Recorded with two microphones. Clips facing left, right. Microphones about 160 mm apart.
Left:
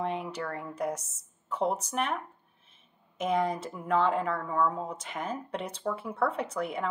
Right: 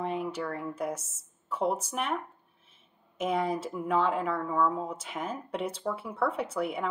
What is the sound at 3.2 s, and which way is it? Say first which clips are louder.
Speech: left 1 dB; 5° right (ahead or behind).